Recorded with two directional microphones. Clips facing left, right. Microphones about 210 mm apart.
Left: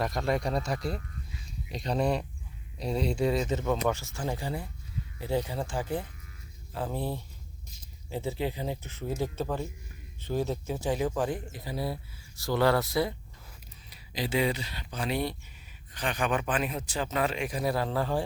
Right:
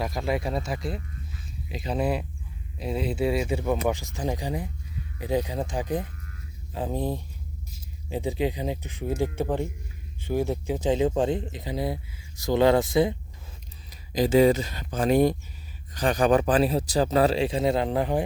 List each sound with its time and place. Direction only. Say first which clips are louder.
0.0 s speech: right 1 dB; centre (ahead or behind); by 13.1 s 20° right (ahead or behind)
13.9 s speech: right 10 dB; 45° right (ahead or behind); by 18.3 s 20° right (ahead or behind)